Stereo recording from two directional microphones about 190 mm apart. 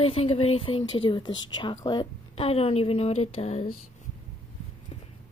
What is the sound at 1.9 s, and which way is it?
A woman's voice, 25° left (ahead or behind).